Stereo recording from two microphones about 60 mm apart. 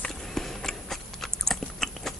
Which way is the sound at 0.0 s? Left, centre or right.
Centre.